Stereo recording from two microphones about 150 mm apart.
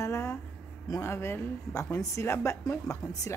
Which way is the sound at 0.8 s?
20° left (ahead or behind).